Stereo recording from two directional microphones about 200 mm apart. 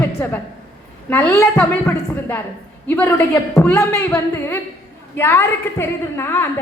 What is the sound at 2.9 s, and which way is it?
A woman's voice, 10° left (ahead or behind).